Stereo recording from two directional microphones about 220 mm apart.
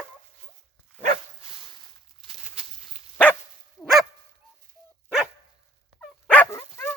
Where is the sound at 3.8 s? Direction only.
Centre (ahead or behind).